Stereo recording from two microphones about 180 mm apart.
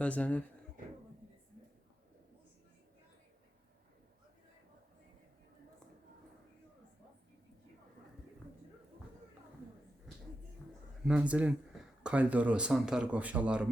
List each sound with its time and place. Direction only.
0.0 s speech: 5° left (ahead or behind)
10.6 s a sound: 10° left (ahead or behind)
11.0 s speech: 5° right (ahead or behind)